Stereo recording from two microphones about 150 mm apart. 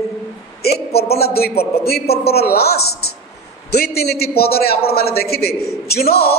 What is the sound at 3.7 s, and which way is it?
A man's voice, 90° left.